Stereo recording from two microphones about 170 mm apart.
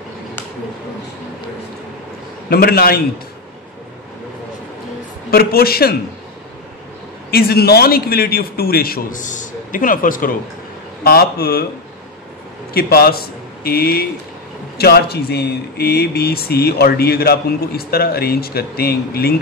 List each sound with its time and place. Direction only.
2.5 s speech: 65° left (ahead or behind)
5.3 s speech: 60° left (ahead or behind)
7.2 s speech: 65° left (ahead or behind)
11.1 s speech: 65° left (ahead or behind)
12.7 s speech: 65° left (ahead or behind)